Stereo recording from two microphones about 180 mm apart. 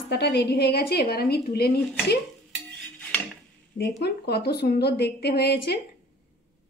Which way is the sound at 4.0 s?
65° left (ahead or behind).